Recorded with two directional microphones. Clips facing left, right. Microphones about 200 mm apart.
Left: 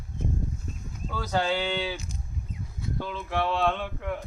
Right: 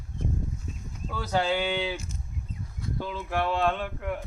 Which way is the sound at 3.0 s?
10° right (ahead or behind).